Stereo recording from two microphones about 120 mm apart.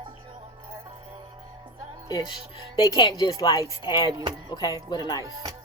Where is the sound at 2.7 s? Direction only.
40° left (ahead or behind).